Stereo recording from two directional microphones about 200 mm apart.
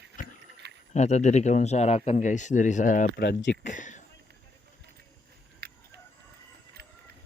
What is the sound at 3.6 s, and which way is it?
Speech, 40° left (ahead or behind).